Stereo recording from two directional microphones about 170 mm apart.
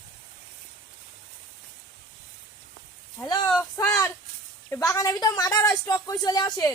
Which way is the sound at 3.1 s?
25° left (ahead or behind).